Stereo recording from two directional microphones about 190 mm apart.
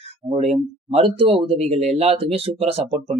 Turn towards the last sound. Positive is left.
turn(degrees=-30)  # may be behind; listen again after turning